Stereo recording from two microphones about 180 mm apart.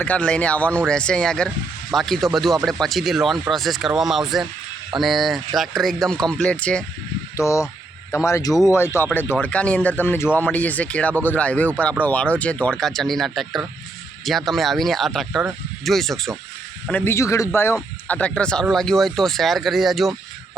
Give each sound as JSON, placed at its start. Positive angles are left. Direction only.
{"t": 0.0, "sound": "speech", "side_deg": 10}
{"t": 7.3, "sound": "speech", "side_deg": 15}
{"t": 16.9, "sound": "speech", "side_deg": 15}